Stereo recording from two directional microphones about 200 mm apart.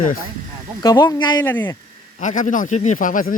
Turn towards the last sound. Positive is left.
turn(degrees=40)  # may be behind; listen again after turning